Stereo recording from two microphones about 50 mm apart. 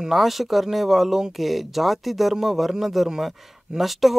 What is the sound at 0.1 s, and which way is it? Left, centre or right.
A man's voice, centre.